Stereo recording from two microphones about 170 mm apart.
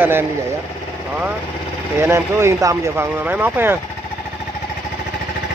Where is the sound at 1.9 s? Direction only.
15° right (ahead or behind).